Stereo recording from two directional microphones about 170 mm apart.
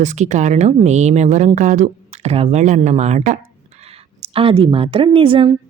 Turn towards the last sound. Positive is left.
turn(degrees=-30)  # may be behind; listen again after turning